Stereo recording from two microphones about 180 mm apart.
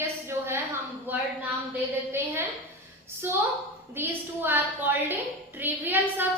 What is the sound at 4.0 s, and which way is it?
A woman's voice, 10° right (ahead or behind).